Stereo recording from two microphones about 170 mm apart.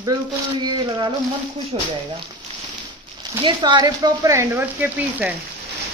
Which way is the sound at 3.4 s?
25° right (ahead or behind).